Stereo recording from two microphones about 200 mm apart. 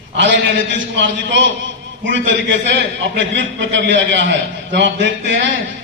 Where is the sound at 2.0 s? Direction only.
65° right (ahead or behind).